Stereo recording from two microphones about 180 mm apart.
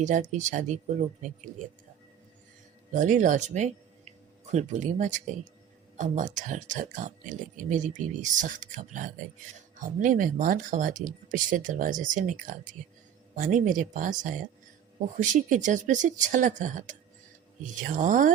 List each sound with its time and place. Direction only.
0.0 s speech: 40° right (ahead or behind)
2.9 s speech: 45° right (ahead or behind)